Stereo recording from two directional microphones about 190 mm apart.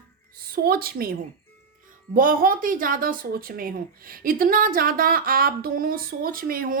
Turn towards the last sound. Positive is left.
turn(degrees=-50)  # may be behind; listen again after turning